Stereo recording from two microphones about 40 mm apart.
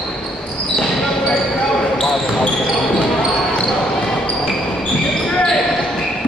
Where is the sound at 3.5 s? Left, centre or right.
Centre.